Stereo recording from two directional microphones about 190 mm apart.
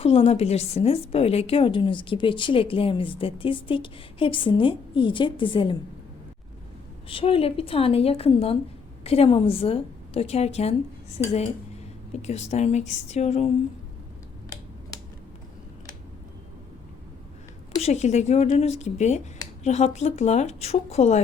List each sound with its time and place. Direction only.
0.0 s a woman's voice: 30° left (ahead or behind)
7.1 s a woman's voice: 30° left (ahead or behind)
17.8 s a woman's voice: 35° left (ahead or behind)